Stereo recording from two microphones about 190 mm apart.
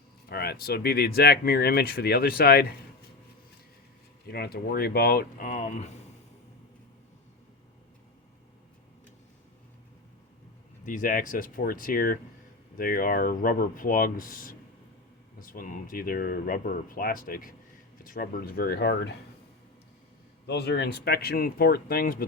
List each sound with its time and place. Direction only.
0.3 s speech: 55° left (ahead or behind)
4.3 s speech: 55° left (ahead or behind); by 6.0 s 35° left (ahead or behind)
10.8 s speech: 45° left (ahead or behind); by 19.1 s 60° left (ahead or behind)
20.5 s speech: 60° left (ahead or behind)